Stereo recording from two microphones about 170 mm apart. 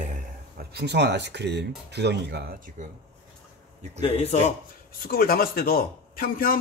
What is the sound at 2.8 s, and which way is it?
Speech, 50° right (ahead or behind).